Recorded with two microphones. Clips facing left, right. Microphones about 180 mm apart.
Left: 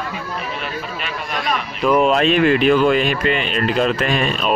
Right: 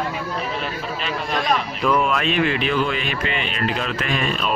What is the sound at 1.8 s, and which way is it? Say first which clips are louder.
Speech: left 6 dB; 25° left (ahead or behind).